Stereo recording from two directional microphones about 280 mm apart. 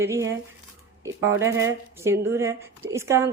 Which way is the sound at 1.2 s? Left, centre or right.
Right.